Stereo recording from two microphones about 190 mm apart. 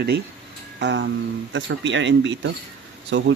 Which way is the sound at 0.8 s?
70° right (ahead or behind).